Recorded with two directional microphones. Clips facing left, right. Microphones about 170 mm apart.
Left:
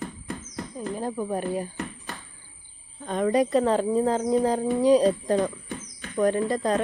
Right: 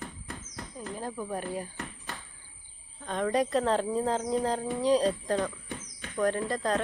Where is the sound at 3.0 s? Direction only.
10° left (ahead or behind).